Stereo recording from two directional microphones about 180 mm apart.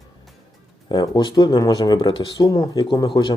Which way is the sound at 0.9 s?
25° left (ahead or behind).